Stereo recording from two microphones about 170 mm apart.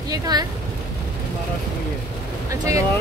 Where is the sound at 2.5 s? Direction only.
20° right (ahead or behind).